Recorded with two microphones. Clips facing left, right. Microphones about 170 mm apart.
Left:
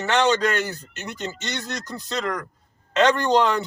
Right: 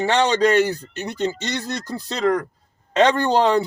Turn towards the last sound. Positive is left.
turn(degrees=-35)  # may be behind; listen again after turning